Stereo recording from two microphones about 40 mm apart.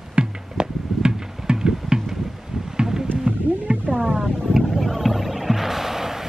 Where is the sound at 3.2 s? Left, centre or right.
Right.